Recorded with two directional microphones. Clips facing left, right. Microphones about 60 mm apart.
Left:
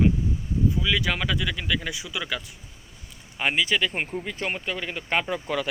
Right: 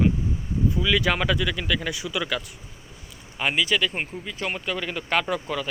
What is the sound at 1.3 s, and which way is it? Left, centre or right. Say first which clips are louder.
Speech: right 2 dB; centre.